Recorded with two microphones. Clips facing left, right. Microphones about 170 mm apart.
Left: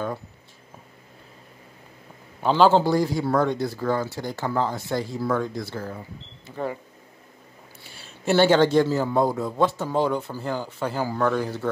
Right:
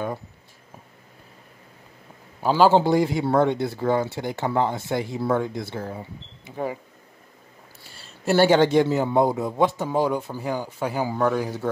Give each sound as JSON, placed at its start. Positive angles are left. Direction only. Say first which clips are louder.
{"t": 2.4, "sound": "a man's voice", "louder": "even", "side_deg": -10}
{"t": 2.8, "sound": "speech", "louder": "right 2 dB", "side_deg": -20}
{"t": 8.3, "sound": "a man's voice", "louder": "right 1 dB", "side_deg": -10}